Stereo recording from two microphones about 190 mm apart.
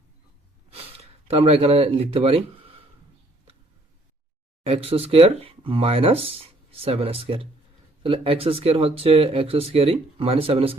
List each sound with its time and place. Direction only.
0.7 s speech: 30° right (ahead or behind)
4.6 s speech: 30° right (ahead or behind)